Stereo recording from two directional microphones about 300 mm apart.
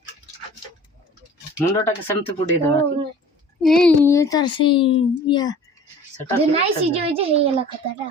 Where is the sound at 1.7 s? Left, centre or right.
Centre.